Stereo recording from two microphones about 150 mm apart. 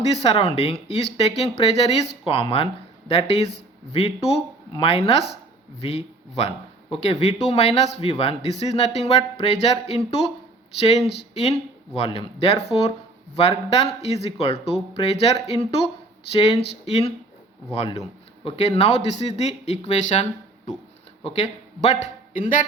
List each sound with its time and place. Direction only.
0.1 s speech: 45° left (ahead or behind)
17.7 s speech: 45° left (ahead or behind)
21.2 s a man's voice: 50° left (ahead or behind)